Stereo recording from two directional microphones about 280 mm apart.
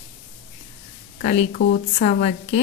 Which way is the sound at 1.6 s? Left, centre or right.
Left.